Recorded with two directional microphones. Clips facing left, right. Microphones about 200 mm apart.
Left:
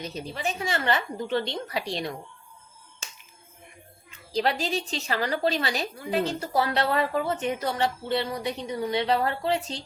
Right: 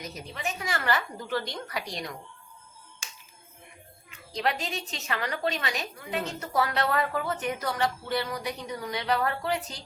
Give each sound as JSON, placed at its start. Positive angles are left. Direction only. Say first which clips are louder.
{"t": 0.0, "sound": "a woman's voice", "louder": "left 4 dB", "side_deg": 30}
{"t": 4.3, "sound": "a woman's voice", "louder": "left 4 dB", "side_deg": 35}